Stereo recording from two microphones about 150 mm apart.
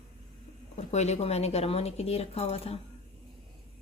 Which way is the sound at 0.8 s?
45° left (ahead or behind).